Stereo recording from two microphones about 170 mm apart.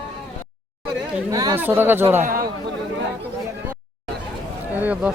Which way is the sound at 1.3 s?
20° right (ahead or behind).